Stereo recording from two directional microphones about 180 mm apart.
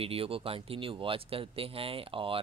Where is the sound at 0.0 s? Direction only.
30° right (ahead or behind).